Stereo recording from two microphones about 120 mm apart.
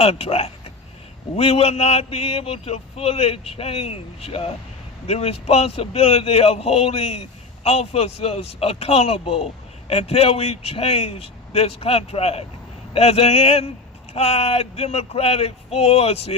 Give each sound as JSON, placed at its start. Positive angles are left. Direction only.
{"t": 0.0, "sound": "a man's voice", "side_deg": 55}